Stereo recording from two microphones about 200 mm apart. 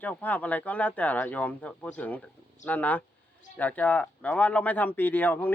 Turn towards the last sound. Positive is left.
turn(degrees=10)  # may be behind; listen again after turning